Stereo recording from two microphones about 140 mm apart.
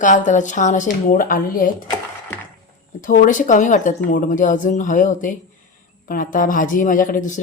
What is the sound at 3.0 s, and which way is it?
Speech, 70° left (ahead or behind).